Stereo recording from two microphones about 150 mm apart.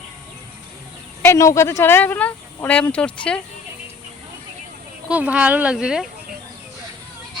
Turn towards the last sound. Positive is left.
turn(degrees=-5)  # may be behind; listen again after turning